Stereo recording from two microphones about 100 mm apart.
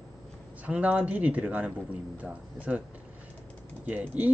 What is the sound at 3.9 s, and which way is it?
Speech, 15° right (ahead or behind).